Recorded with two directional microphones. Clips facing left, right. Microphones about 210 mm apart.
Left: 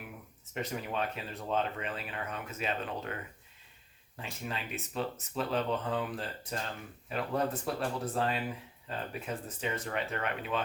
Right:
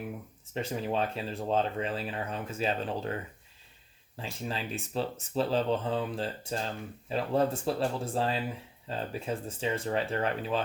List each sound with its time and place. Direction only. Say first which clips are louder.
0.5 s speech: right 4 dB; 30° right (ahead or behind)
4.2 s speech: right 4 dB; 30° right (ahead or behind)